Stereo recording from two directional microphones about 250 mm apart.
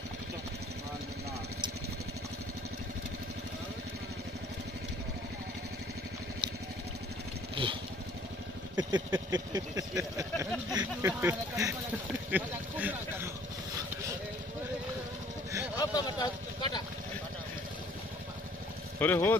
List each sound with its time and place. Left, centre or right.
8.7 s speech: centre
15.8 s a sound: centre
18.9 s speech: centre